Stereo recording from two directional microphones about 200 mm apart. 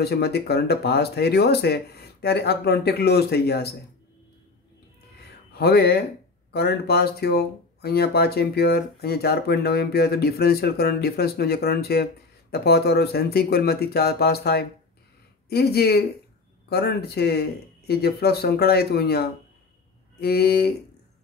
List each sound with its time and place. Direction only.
0.0 s speech: 55° left (ahead or behind)
5.6 s speech: 50° left (ahead or behind)